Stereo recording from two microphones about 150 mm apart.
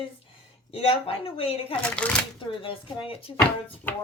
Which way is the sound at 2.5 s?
35° left (ahead or behind).